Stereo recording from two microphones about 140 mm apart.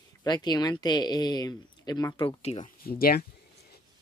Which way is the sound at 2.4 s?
45° left (ahead or behind).